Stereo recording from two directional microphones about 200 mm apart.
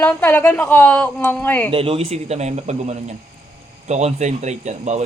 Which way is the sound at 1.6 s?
25° right (ahead or behind).